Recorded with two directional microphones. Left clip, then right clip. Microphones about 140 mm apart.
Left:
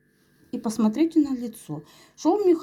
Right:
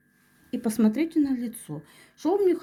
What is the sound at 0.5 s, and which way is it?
A woman's voice, 10° right (ahead or behind).